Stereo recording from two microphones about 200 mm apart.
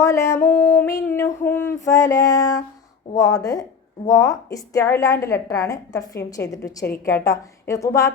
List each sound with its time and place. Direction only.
0.0 s a woman's voice: 15° left (ahead or behind)